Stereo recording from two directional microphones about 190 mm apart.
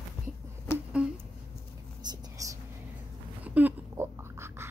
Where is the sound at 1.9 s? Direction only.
20° right (ahead or behind).